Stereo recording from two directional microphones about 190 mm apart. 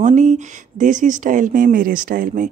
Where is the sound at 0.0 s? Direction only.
40° right (ahead or behind).